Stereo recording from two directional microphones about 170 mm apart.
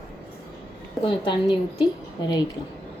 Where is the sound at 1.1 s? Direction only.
30° left (ahead or behind).